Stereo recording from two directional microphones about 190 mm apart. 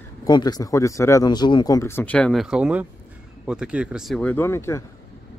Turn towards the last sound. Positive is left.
turn(degrees=15)  # may be behind; listen again after turning